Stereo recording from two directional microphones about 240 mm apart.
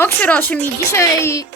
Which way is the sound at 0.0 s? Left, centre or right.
Centre.